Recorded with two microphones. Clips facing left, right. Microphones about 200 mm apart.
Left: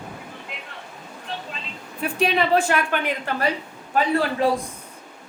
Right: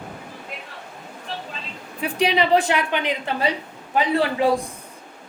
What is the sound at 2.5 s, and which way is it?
A woman's voice, 15° right (ahead or behind).